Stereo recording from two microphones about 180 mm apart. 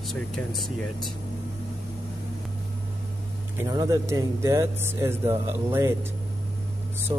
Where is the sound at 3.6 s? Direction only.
20° right (ahead or behind).